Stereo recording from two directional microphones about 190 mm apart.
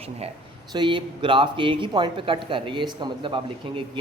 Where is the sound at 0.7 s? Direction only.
25° right (ahead or behind).